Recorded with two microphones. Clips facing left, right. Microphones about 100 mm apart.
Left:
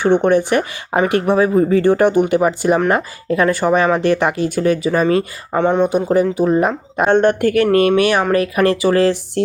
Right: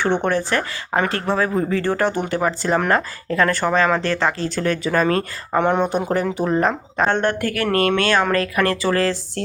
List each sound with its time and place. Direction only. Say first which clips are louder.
0.0 s speech: left 6 dB; 15° left (ahead or behind)